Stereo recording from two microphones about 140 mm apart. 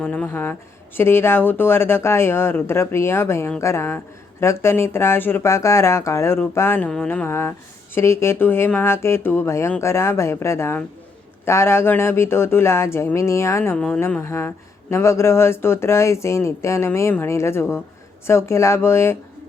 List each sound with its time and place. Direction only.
0.0 s speech: 10° left (ahead or behind)
13.7 s speech: 5° left (ahead or behind)
14.0 s speech: 15° left (ahead or behind)